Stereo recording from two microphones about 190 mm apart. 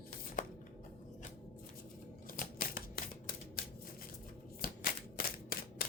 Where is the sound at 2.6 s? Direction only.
50° left (ahead or behind).